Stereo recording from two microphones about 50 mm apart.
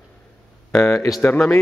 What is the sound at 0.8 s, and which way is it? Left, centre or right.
Speech, centre.